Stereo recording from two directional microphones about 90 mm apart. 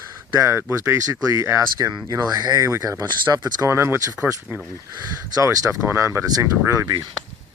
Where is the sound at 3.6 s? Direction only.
30° right (ahead or behind).